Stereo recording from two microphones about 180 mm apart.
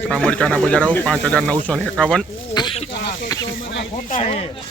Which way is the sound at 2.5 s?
30° left (ahead or behind).